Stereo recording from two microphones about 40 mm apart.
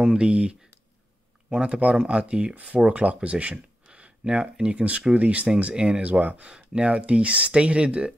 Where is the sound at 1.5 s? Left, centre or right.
Right.